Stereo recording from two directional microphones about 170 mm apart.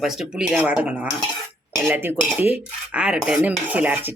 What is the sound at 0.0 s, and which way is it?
Speech, 5° right (ahead or behind).